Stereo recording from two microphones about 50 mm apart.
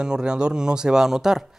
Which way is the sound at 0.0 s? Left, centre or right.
Centre.